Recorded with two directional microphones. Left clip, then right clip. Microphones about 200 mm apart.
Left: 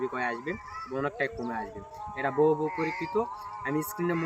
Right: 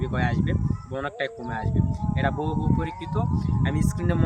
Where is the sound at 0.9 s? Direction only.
20° right (ahead or behind).